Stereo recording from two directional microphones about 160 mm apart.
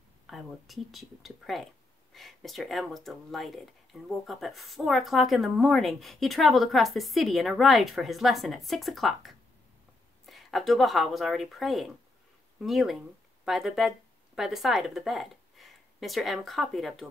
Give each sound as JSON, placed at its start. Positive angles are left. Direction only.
{"t": 0.3, "sound": "speech", "side_deg": 0}